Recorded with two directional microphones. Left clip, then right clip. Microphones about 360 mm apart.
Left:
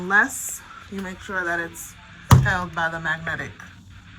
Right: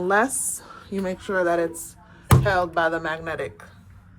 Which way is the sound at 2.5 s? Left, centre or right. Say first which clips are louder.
Right 4 dB; centre.